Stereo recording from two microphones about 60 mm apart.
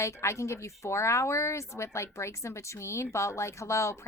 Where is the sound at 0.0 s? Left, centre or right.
Left.